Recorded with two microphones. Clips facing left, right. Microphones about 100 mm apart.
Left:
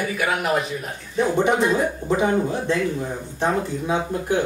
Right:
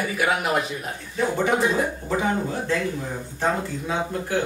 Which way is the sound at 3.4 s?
20° left (ahead or behind).